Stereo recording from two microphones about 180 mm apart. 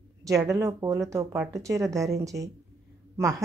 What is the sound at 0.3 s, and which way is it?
Speech, 15° right (ahead or behind).